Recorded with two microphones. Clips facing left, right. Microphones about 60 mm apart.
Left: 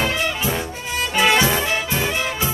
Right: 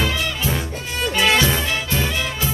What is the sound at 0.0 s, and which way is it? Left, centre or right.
Music, left.